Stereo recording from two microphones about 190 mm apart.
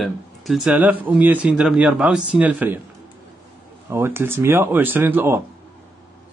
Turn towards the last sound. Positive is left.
turn(degrees=-10)  # may be behind; listen again after turning